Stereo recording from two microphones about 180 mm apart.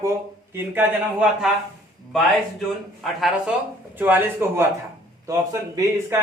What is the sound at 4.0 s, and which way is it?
Speech, 10° right (ahead or behind).